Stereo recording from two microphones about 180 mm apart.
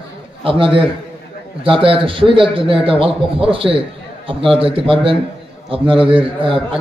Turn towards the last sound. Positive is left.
turn(degrees=-30)  # may be behind; listen again after turning